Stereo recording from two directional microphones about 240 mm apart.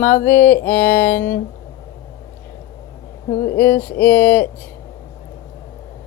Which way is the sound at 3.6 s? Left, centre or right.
Centre.